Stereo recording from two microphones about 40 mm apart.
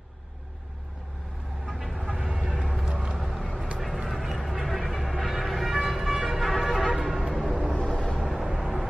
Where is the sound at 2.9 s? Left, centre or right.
Right.